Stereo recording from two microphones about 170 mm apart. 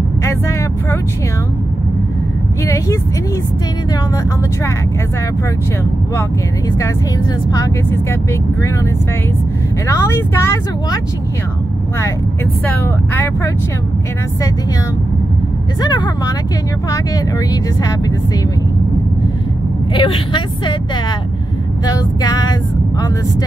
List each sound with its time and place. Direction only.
0.2 s vehicle: 15° left (ahead or behind)
2.6 s speech: 15° left (ahead or behind)
7.5 s speech: 15° left (ahead or behind)
9.8 s speech: 15° left (ahead or behind)
12.6 s speech: 15° left (ahead or behind)
15.8 s speech: 25° left (ahead or behind)
19.9 s speech: 30° left (ahead or behind)
21.8 s speech: 25° left (ahead or behind)